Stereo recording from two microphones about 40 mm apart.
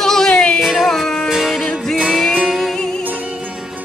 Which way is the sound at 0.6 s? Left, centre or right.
Centre.